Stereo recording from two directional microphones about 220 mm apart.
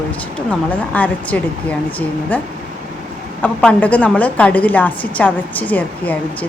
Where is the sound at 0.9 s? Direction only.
5° left (ahead or behind).